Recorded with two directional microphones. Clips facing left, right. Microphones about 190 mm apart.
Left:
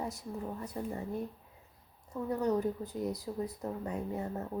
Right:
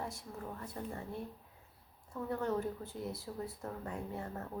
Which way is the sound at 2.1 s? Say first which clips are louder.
Left 5 dB; 20° left (ahead or behind).